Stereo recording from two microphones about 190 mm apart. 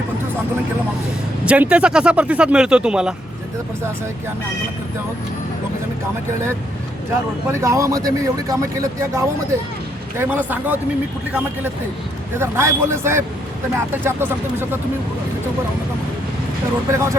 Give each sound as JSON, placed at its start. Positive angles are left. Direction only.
{"t": 1.5, "sound": "speech", "side_deg": -5}
{"t": 7.6, "sound": "speech", "side_deg": -15}
{"t": 16.9, "sound": "speech", "side_deg": -15}